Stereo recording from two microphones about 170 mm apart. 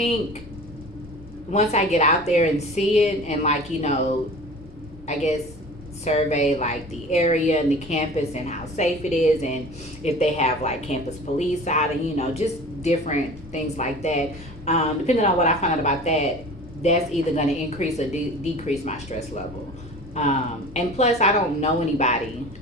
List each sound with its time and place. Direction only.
1.5 s a woman's voice: 40° left (ahead or behind)
5.0 s a woman's voice: 40° left (ahead or behind)